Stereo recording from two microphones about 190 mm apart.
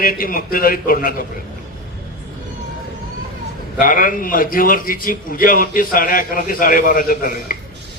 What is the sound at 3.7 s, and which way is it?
A man's voice, 45° left (ahead or behind).